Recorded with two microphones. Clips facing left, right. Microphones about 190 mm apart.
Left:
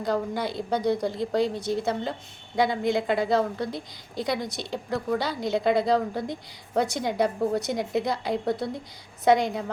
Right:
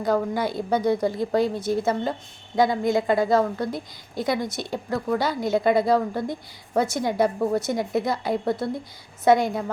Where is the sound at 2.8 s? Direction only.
45° right (ahead or behind).